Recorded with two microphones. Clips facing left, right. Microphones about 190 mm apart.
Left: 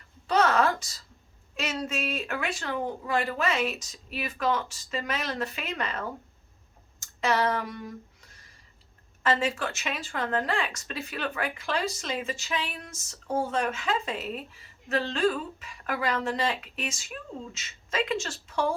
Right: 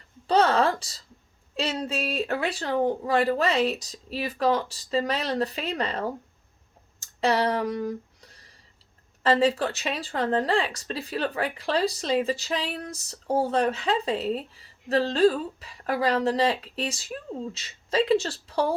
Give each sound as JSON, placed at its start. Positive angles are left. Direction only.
{"t": 0.3, "sound": "speech", "side_deg": -30}